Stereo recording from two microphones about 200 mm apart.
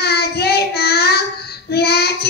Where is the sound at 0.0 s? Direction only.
55° left (ahead or behind).